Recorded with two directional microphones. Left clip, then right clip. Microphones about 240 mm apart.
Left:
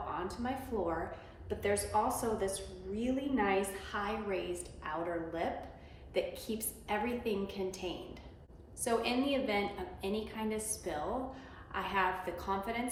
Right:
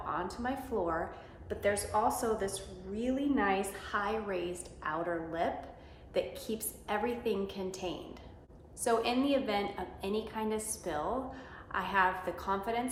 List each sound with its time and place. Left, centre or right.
0.1 s a woman's voice: centre